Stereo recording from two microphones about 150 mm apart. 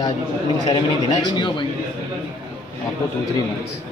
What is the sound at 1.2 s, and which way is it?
Speech, 30° left (ahead or behind).